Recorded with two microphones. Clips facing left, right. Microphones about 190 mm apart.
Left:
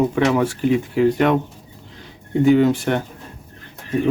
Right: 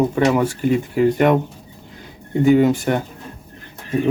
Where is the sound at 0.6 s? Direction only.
50° right (ahead or behind).